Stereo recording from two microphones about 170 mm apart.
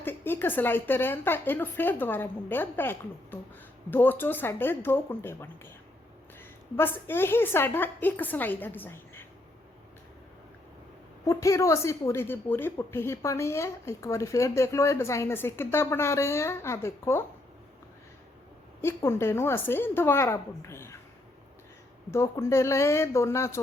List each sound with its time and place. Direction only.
0.0 s a woman's voice: 10° left (ahead or behind)
11.3 s a woman's voice: 15° left (ahead or behind)
18.8 s a woman's voice: 15° left (ahead or behind)
22.1 s a woman's voice: 15° left (ahead or behind)